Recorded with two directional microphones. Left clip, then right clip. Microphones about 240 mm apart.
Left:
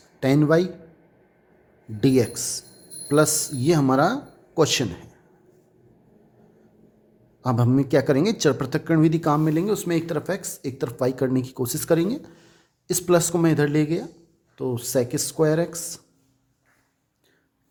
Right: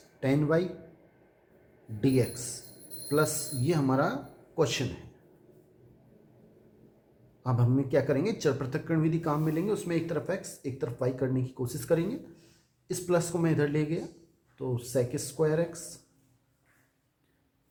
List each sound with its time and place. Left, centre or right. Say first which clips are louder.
0.2 s speech: left 8 dB; left
2.0 s speech: left 7 dB; left
7.4 s speech: left 8 dB; left